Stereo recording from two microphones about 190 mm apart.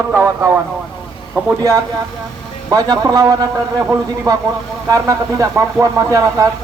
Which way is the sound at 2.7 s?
20° right (ahead or behind).